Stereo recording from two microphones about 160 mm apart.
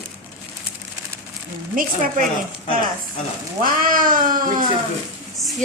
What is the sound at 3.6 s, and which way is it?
Speech, 60° right (ahead or behind).